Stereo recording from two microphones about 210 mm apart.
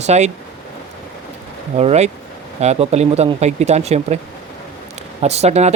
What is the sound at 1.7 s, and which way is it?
Speech, 30° right (ahead or behind).